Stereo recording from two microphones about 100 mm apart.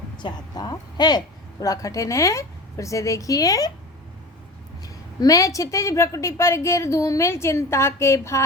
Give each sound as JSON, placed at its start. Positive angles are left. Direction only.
{"t": 0.2, "sound": "a woman's voice", "side_deg": 45}
{"t": 4.8, "sound": "a woman's voice", "side_deg": 35}